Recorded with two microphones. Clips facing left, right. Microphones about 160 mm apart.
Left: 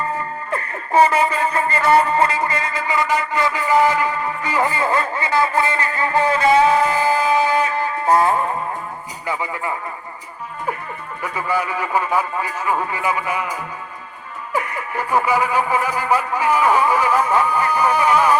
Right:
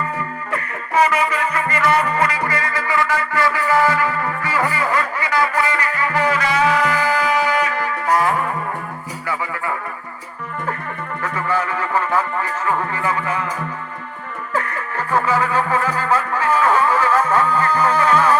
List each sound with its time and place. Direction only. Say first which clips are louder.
0.5 s music: left 3 dB; 30° left (ahead or behind)
11.2 s speech: even; 10° left (ahead or behind)
14.5 s music: left 1 dB; 10° left (ahead or behind)